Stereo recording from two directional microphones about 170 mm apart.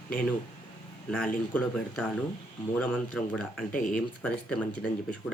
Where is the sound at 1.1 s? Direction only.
5° left (ahead or behind).